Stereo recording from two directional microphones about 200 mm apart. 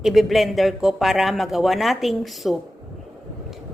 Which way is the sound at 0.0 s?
Centre (ahead or behind).